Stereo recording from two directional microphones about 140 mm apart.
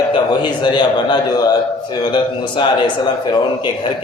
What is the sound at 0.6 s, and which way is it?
A man's voice, 35° left (ahead or behind).